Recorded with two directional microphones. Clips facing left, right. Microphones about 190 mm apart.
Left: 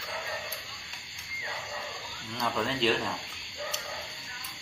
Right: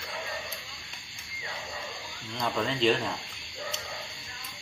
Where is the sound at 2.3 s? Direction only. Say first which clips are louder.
Right 1 dB; centre (ahead or behind).